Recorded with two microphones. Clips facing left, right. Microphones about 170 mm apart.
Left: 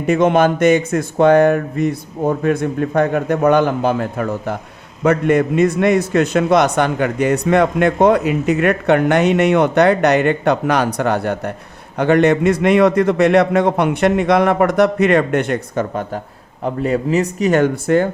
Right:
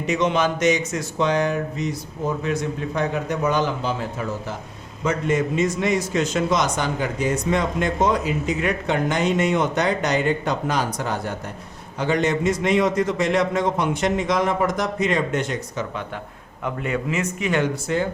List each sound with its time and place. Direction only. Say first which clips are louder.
0.0 s a man's voice: left 8 dB; 50° left (ahead or behind)
16.6 s speech: left 7 dB; 35° left (ahead or behind); by 18.1 s 55° left (ahead or behind)